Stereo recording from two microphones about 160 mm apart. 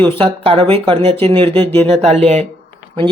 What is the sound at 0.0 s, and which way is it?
Speech, 35° right (ahead or behind).